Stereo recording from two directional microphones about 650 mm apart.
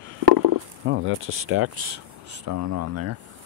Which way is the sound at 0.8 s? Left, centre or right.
Centre.